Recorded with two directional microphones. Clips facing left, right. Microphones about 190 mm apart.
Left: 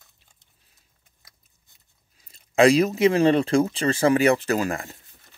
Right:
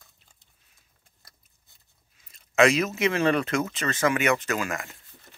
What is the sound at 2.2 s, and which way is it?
Speech, 30° left (ahead or behind).